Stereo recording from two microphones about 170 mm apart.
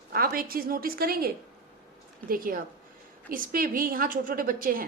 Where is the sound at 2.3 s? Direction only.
55° right (ahead or behind).